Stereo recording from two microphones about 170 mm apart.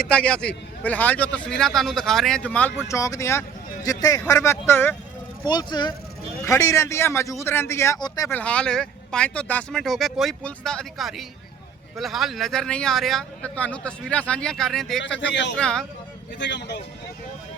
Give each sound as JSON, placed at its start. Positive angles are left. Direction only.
{"t": 0.0, "sound": "a man's voice", "side_deg": 5}
{"t": 5.5, "sound": "a man's voice", "side_deg": 25}
{"t": 8.4, "sound": "speech", "side_deg": 5}
{"t": 16.4, "sound": "speech", "side_deg": 90}